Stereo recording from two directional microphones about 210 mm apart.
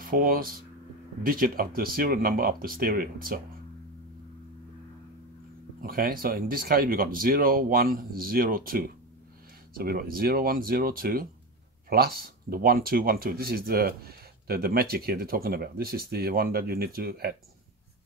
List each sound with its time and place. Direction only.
0.0 s speech: 45° right (ahead or behind)
5.8 s speech: 45° right (ahead or behind)